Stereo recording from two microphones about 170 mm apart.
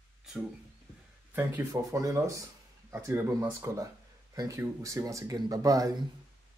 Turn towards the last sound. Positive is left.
turn(degrees=-20)  # may be behind; listen again after turning